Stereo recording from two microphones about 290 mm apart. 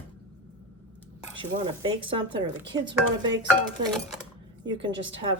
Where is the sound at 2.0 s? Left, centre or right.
Centre.